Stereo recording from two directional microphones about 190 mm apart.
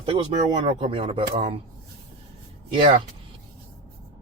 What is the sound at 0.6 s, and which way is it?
Speech, 30° right (ahead or behind).